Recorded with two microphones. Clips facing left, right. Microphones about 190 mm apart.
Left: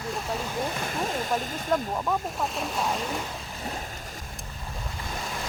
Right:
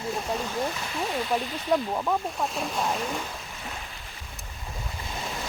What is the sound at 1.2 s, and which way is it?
Speech, 45° left (ahead or behind).